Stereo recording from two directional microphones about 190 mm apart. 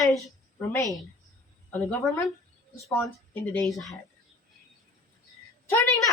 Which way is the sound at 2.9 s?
10° left (ahead or behind).